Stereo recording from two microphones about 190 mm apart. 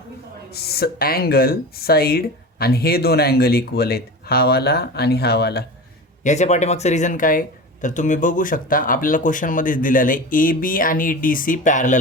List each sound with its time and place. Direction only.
0.5 s speech: 55° left (ahead or behind)
6.2 s speech: 35° left (ahead or behind)